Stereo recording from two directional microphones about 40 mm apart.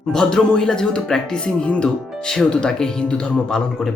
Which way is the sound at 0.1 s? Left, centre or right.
Centre.